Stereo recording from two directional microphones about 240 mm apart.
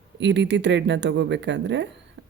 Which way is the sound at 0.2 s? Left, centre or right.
Right.